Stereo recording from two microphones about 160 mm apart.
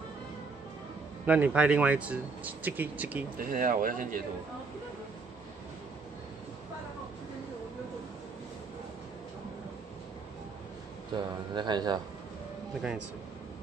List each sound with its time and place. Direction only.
1.2 s speech: 10° right (ahead or behind)
3.3 s speech: 60° right (ahead or behind)
11.1 s speech: 25° right (ahead or behind)